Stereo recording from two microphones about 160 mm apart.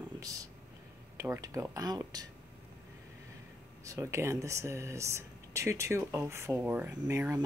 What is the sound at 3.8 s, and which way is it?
Speech, 20° right (ahead or behind).